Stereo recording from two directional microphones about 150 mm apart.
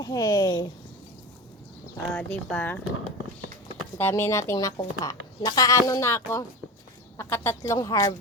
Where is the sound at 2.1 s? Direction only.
10° left (ahead or behind).